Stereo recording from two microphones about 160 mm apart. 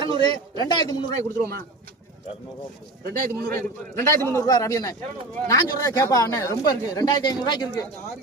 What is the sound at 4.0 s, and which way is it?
A man's voice, 20° left (ahead or behind).